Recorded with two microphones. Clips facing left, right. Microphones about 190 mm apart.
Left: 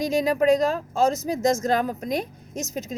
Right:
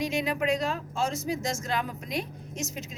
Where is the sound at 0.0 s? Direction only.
40° left (ahead or behind).